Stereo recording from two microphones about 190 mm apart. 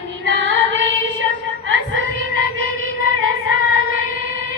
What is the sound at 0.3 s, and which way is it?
Female singing, 85° right.